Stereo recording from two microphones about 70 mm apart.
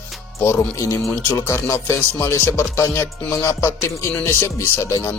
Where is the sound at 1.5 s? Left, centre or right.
Left.